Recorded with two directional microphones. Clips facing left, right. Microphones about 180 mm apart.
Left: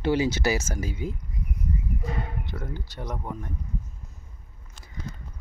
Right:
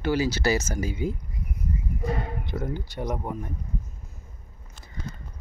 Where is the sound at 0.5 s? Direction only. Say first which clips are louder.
Right 2 dB; 5° left (ahead or behind).